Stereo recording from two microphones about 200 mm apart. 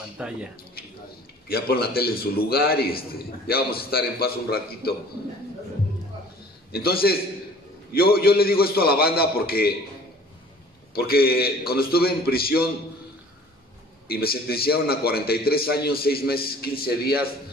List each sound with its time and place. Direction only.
0.2 s speech: 5° right (ahead or behind)
1.5 s a man's voice: 50° left (ahead or behind)
6.7 s a man's voice: 50° left (ahead or behind)
11.0 s a man's voice: 50° left (ahead or behind)
14.0 s a man's voice: 50° left (ahead or behind)